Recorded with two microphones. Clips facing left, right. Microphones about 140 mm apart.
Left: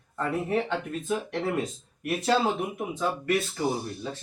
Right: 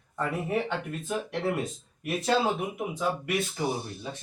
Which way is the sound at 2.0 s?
Centre (ahead or behind).